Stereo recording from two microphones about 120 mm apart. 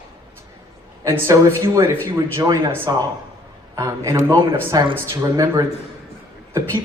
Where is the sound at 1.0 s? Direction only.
25° right (ahead or behind).